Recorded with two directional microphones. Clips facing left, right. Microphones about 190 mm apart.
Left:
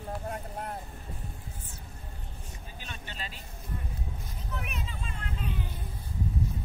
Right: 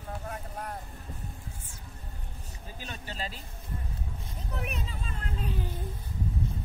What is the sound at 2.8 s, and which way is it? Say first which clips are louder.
Speech: right 4 dB; 40° right (ahead or behind).